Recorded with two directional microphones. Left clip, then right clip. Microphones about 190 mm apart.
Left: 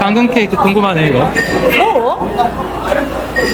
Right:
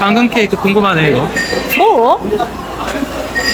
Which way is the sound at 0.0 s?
5° left (ahead or behind).